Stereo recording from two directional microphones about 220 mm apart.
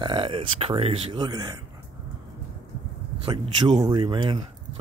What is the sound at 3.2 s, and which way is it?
Speech, 20° right (ahead or behind).